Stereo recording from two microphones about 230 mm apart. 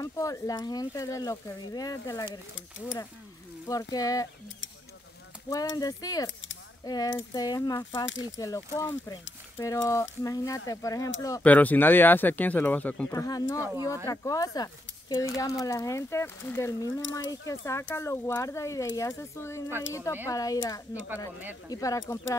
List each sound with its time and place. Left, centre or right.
0.0 s speech: centre
3.6 s speech: centre
5.5 s speech: centre
8.0 s speech: left
8.4 s speech: centre
21.6 s speech: centre